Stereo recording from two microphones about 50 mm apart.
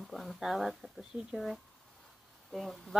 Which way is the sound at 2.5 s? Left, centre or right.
Centre.